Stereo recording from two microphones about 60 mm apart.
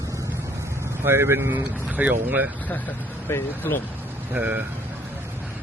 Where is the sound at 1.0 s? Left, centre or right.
Right.